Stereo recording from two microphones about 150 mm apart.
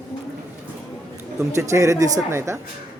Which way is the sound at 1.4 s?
20° right (ahead or behind).